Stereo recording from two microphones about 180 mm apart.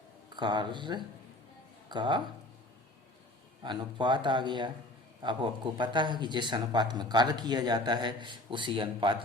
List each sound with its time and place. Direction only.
0.3 s speech: 25° right (ahead or behind)
3.6 s speech: 25° right (ahead or behind)